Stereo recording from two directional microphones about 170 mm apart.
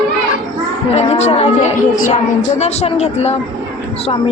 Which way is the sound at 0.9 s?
40° left (ahead or behind).